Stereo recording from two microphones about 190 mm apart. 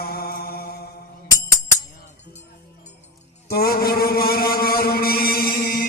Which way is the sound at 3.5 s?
55° left (ahead or behind).